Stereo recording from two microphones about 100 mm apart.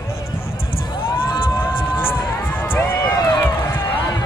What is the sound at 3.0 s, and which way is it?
Run, 40° left (ahead or behind).